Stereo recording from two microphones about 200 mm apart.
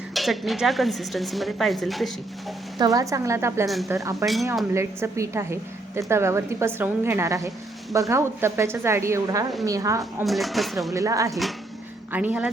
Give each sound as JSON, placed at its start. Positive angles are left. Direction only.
{"t": 0.1, "sound": "a woman's voice", "side_deg": 0}
{"t": 2.7, "sound": "a woman's voice", "side_deg": -20}
{"t": 10.2, "sound": "a woman's voice", "side_deg": 0}
{"t": 10.9, "sound": "a woman's voice", "side_deg": -15}
{"t": 11.3, "sound": "a woman's voice", "side_deg": 0}